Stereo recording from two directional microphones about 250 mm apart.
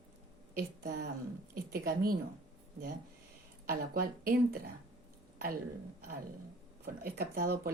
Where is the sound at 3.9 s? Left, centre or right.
Right.